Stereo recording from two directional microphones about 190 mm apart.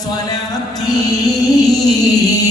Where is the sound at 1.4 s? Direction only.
20° left (ahead or behind).